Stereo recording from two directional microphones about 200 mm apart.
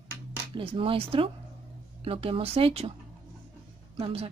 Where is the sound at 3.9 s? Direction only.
30° right (ahead or behind).